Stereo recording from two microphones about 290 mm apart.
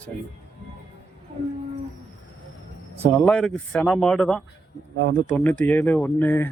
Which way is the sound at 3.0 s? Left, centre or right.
Centre.